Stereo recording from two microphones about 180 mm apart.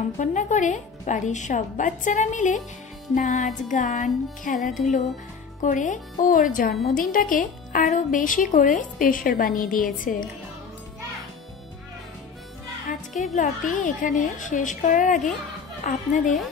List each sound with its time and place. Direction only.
0.2 s speech: 45° left (ahead or behind)
13.1 s speech: 45° left (ahead or behind)